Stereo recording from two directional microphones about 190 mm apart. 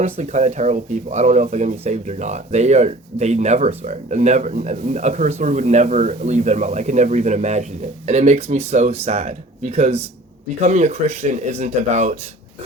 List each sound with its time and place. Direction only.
0.0 s speech: 35° right (ahead or behind)